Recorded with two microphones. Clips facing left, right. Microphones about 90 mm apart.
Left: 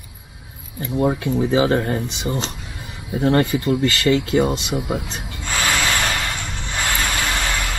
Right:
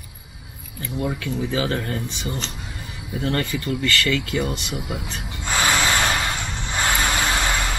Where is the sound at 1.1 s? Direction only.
25° left (ahead or behind).